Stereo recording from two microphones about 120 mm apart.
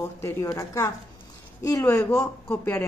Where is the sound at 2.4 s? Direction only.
15° left (ahead or behind).